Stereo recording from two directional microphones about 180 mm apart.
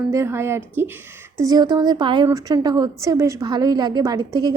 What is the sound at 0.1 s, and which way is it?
A woman's voice, 15° right (ahead or behind).